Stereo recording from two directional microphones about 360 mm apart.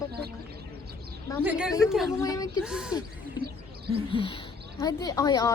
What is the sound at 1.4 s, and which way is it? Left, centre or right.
A woman's voice, centre.